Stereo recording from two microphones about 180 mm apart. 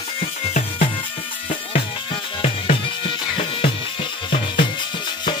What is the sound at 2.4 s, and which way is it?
Music, 30° left (ahead or behind).